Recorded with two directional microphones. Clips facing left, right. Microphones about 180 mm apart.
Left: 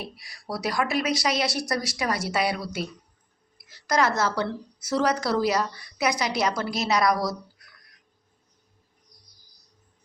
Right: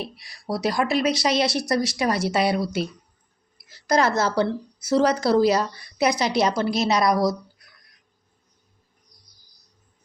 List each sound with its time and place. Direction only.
0.0 s a woman's voice: 25° right (ahead or behind)